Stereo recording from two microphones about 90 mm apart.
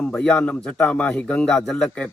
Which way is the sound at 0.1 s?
5° left (ahead or behind).